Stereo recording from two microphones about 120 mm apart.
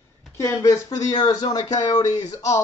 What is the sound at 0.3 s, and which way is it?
Speech, 20° left (ahead or behind).